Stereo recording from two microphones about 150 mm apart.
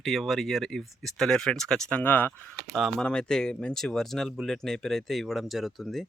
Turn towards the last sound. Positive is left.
turn(degrees=0)  # may be behind; listen again after turning